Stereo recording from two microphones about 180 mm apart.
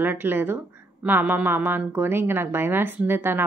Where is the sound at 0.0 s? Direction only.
10° right (ahead or behind).